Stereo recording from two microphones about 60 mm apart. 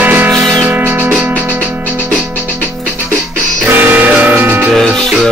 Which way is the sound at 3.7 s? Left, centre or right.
Right.